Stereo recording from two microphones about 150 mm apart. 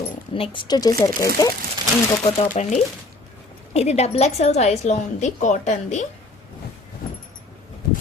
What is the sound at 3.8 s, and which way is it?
A woman's voice, 45° left (ahead or behind).